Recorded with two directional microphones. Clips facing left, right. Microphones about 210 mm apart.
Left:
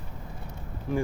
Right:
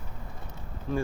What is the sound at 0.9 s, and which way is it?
Speech, 15° left (ahead or behind).